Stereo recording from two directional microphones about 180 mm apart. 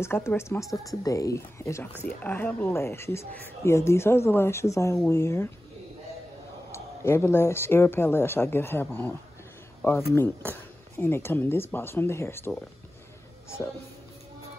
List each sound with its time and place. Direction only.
0.0 s speech: 15° left (ahead or behind)
6.7 s speech: 15° left (ahead or behind)
9.8 s a sound: 10° left (ahead or behind)
10.1 s speech: 10° left (ahead or behind)